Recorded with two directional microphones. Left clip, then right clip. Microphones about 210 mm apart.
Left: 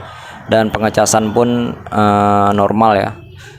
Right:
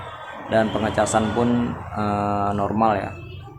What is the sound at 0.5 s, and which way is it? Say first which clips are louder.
Speech: left 7 dB; 40° left (ahead or behind).